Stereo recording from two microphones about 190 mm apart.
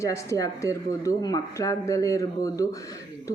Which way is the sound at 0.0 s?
15° left (ahead or behind).